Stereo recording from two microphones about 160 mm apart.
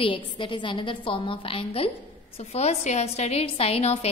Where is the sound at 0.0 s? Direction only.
30° left (ahead or behind).